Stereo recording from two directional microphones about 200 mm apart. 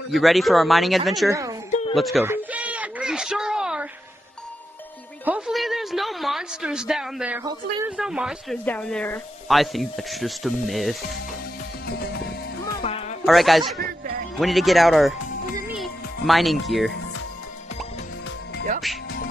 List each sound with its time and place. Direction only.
0.1 s speech: centre (ahead or behind)
1.3 s a woman's voice: 15° right (ahead or behind)
1.7 s a sound: 35° left (ahead or behind)
2.0 s speech: centre (ahead or behind)
2.2 s a sound: 10° right (ahead or behind)
5.2 s a sound: 5° right (ahead or behind)
7.9 s speech: 5° right (ahead or behind)
11.8 s music: 50° left (ahead or behind)
12.6 s music: 25° left (ahead or behind)
13.2 s speech: centre (ahead or behind)